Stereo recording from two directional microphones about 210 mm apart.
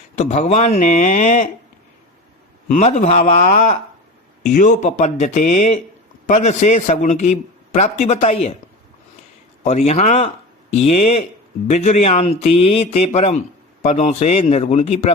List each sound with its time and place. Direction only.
0.2 s a man's voice: 30° left (ahead or behind)
2.7 s a man's voice: 35° left (ahead or behind)
9.6 s a man's voice: 30° left (ahead or behind)